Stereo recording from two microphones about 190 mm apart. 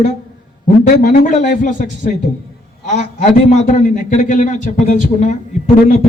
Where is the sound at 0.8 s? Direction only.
45° left (ahead or behind).